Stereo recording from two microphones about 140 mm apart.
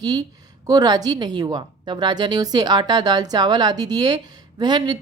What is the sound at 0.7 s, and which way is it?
A woman's voice, 25° right (ahead or behind).